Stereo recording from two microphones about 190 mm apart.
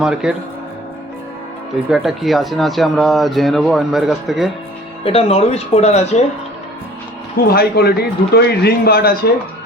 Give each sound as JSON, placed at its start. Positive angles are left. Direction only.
{"t": 0.0, "sound": "speech", "side_deg": -5}
{"t": 1.9, "sound": "speech", "side_deg": 0}
{"t": 5.0, "sound": "speech", "side_deg": 30}
{"t": 7.3, "sound": "speech", "side_deg": 55}